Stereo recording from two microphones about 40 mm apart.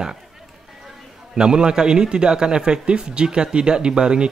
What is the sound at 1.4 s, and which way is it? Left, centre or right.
A man's voice, right.